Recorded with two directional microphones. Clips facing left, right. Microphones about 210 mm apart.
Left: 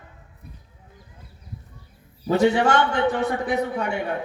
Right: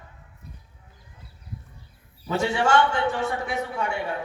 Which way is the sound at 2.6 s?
20° left (ahead or behind).